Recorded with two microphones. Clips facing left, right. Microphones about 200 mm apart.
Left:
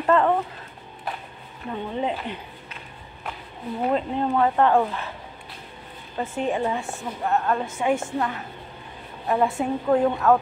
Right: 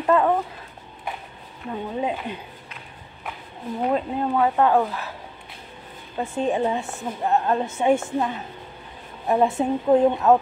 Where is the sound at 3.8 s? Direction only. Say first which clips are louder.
Even; 5° right (ahead or behind).